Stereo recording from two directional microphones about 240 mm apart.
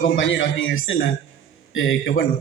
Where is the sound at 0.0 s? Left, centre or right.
Left.